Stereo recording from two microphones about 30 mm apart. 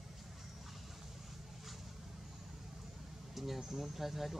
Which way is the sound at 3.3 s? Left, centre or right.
Centre.